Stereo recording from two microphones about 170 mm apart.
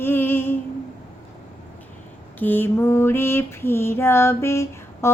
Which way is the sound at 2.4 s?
10° left (ahead or behind).